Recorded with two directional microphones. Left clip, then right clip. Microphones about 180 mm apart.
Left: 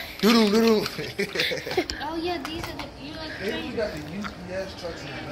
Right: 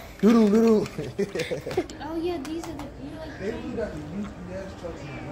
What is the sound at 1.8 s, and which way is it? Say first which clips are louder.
Speech: left 1 dB; 75° right (ahead or behind).